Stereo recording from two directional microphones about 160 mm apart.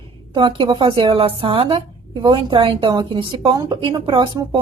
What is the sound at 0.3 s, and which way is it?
A woman's voice, 35° right (ahead or behind).